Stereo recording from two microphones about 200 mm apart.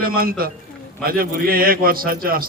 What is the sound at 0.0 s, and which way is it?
A man's voice, 45° right (ahead or behind).